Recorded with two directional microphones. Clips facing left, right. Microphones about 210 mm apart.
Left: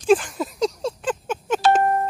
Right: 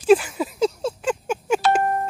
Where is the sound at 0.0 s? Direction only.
5° right (ahead or behind).